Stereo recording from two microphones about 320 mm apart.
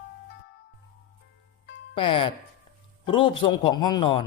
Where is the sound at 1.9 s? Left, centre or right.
Centre.